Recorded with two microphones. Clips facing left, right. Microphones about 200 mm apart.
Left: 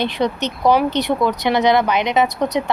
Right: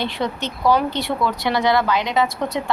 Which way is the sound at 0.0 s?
20° left (ahead or behind).